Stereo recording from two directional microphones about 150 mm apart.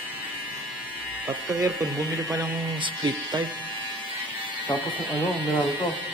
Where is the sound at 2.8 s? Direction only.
35° right (ahead or behind).